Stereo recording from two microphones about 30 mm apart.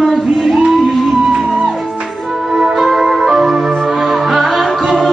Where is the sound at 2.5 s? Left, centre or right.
Centre.